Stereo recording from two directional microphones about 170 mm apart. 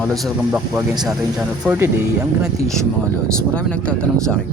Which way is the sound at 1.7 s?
15° right (ahead or behind).